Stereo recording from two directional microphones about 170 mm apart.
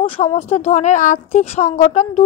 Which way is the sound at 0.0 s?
40° left (ahead or behind).